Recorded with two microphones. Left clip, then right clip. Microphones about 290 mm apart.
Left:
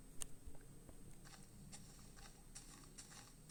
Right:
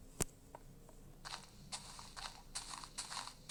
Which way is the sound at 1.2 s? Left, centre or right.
Centre.